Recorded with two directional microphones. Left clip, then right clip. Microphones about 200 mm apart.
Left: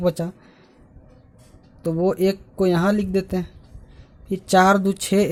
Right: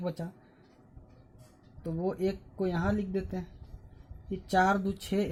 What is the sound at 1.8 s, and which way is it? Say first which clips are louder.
Speech: left 12 dB; 40° left (ahead or behind).